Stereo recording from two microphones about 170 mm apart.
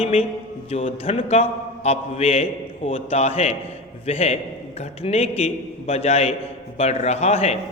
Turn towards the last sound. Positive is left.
turn(degrees=40)  # may be behind; listen again after turning